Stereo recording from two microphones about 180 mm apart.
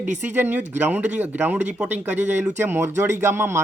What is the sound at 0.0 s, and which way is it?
Speech, 10° right (ahead or behind).